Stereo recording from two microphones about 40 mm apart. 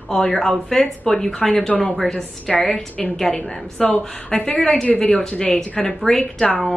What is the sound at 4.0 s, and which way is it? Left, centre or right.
Speech, centre.